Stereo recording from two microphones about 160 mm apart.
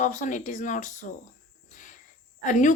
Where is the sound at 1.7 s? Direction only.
50° left (ahead or behind).